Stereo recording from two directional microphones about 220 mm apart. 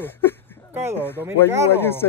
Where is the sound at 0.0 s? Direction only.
10° left (ahead or behind).